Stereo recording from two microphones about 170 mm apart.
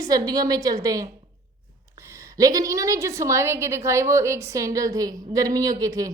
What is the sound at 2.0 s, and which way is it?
A woman's voice, 15° right (ahead or behind).